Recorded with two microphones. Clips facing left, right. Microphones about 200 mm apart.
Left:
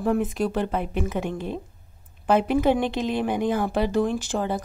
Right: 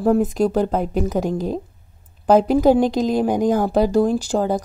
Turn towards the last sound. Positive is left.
turn(degrees=-40)  # may be behind; listen again after turning